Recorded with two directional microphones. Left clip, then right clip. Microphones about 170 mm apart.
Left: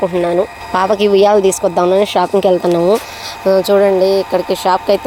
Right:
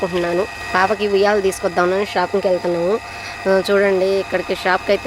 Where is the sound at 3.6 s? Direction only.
10° left (ahead or behind).